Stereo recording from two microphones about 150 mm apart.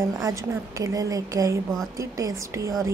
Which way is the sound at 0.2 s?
20° right (ahead or behind).